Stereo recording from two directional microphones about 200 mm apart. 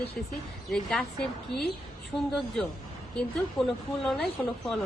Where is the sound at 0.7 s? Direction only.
5° left (ahead or behind).